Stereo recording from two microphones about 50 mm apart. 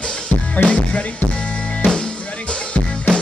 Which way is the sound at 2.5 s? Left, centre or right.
Centre.